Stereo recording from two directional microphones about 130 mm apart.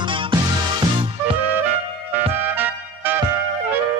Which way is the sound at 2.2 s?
15° right (ahead or behind).